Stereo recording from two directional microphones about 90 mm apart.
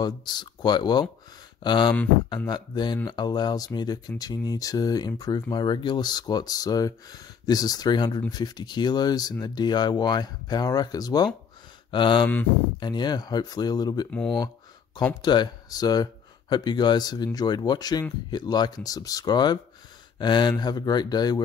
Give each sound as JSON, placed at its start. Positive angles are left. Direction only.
{"t": 0.0, "sound": "speech", "side_deg": 55}
{"t": 11.9, "sound": "speech", "side_deg": 65}
{"t": 15.2, "sound": "speech", "side_deg": 55}